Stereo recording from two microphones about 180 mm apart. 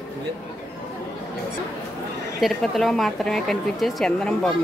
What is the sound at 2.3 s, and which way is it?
A woman's voice, centre (ahead or behind).